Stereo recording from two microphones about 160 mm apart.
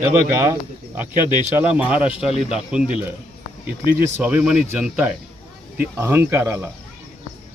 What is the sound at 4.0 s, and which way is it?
Speech, 10° right (ahead or behind).